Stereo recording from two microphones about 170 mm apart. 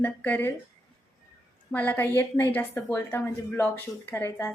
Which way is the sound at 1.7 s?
10° left (ahead or behind).